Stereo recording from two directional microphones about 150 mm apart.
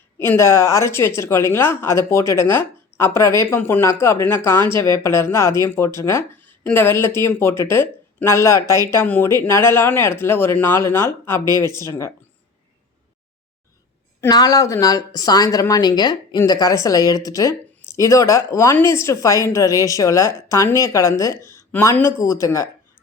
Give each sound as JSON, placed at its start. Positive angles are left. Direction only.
{"t": 0.2, "sound": "speech", "side_deg": 20}
{"t": 14.3, "sound": "speech", "side_deg": 25}